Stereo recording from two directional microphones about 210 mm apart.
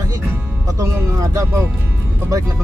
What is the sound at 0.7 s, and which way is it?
Speech, 15° right (ahead or behind).